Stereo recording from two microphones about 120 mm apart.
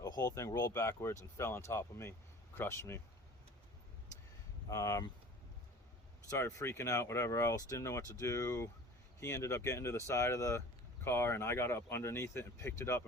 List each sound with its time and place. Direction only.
0.2 s speech: 25° left (ahead or behind)
4.7 s speech: 25° left (ahead or behind)
6.3 s speech: 20° left (ahead or behind)